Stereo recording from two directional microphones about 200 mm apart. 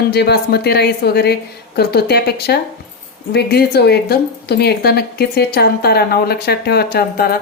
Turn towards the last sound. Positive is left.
turn(degrees=50)  # may be behind; listen again after turning